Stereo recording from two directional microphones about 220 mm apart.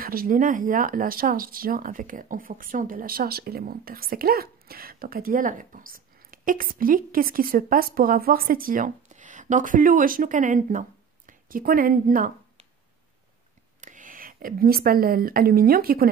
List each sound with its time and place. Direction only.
0.0 s speech: 40° right (ahead or behind)
13.7 s speech: 35° right (ahead or behind)